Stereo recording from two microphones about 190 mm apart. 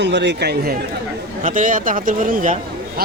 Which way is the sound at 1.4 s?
45° right (ahead or behind).